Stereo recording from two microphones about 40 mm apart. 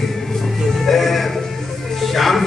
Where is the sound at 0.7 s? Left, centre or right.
Centre.